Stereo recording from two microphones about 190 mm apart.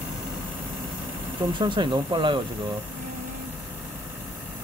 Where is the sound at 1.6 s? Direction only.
25° right (ahead or behind).